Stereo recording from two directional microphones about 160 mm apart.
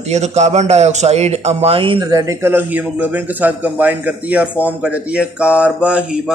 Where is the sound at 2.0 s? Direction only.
20° right (ahead or behind).